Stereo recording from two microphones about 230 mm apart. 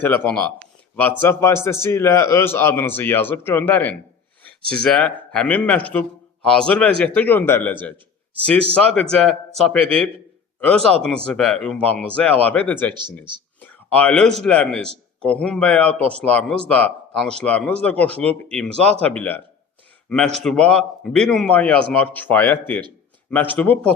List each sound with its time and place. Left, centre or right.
0.0 s a man's voice: centre
12.9 s speech: centre
13.6 s a sound: centre
14.4 s a man's voice: centre